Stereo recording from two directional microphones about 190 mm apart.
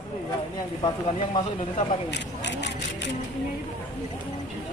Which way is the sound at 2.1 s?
65° left (ahead or behind).